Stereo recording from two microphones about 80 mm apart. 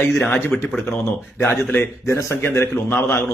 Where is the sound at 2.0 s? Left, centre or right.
Left.